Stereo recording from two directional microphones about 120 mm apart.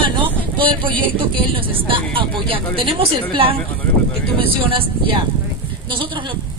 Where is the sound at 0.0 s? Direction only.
45° right (ahead or behind).